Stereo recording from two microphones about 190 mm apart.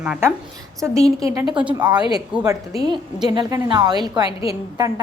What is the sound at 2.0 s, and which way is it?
Speech, 25° left (ahead or behind).